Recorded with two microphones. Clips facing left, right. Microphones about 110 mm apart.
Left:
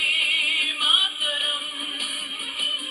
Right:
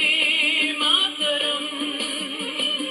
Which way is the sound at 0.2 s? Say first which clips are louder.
Right 6 dB; 55° right (ahead or behind).